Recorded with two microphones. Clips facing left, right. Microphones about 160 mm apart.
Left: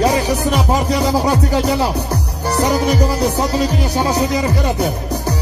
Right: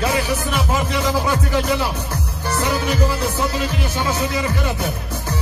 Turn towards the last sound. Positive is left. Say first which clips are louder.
# left 6 dB
turn(degrees=40)  # may be behind; listen again after turning